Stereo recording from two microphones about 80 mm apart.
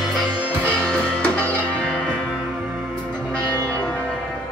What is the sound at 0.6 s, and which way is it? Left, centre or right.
Music, centre.